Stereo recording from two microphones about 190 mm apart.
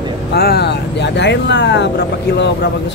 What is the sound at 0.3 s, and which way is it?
Speech, 60° left (ahead or behind).